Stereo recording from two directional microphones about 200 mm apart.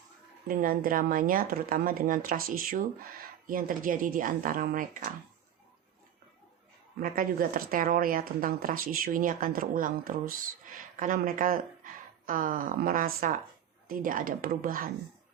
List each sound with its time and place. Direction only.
0.4 s speech: 45° right (ahead or behind)
7.0 s speech: 45° right (ahead or behind)